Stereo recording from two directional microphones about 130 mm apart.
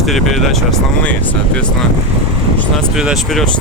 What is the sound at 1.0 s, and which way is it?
Speech, 10° left (ahead or behind).